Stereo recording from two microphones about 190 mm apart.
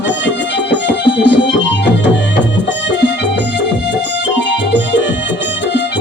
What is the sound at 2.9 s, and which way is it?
Music, 65° left (ahead or behind).